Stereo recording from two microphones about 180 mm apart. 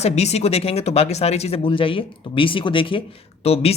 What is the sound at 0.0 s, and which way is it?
Speech, 35° left (ahead or behind).